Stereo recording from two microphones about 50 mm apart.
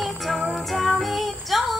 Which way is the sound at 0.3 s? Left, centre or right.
Centre.